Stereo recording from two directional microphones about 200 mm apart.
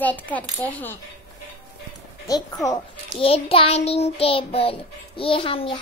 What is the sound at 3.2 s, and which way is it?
Child singing, 30° left (ahead or behind).